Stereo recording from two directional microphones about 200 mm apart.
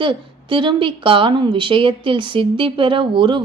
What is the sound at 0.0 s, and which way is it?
A woman's voice, 25° right (ahead or behind).